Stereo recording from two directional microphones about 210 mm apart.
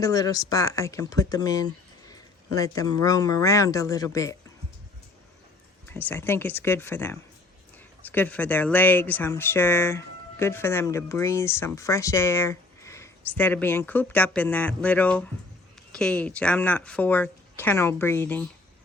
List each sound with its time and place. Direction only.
0.0 s speech: 15° left (ahead or behind)
5.9 s speech: 10° left (ahead or behind)